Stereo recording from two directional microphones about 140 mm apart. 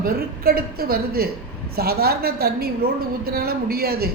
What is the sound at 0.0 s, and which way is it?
A woman's voice, 90° right.